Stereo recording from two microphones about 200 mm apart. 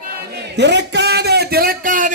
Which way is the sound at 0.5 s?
60° right (ahead or behind).